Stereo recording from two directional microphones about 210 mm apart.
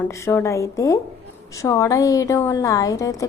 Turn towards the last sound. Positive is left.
turn(degrees=15)  # may be behind; listen again after turning